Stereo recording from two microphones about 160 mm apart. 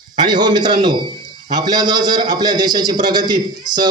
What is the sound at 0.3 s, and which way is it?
A man's voice, 25° right (ahead or behind).